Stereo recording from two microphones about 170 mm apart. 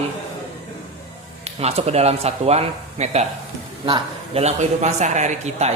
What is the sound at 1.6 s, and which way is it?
A man's voice, 40° right (ahead or behind).